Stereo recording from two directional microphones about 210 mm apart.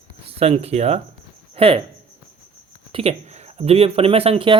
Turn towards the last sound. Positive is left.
turn(degrees=-25)  # may be behind; listen again after turning